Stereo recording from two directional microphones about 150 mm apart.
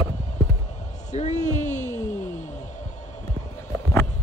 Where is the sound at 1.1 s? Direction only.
50° left (ahead or behind).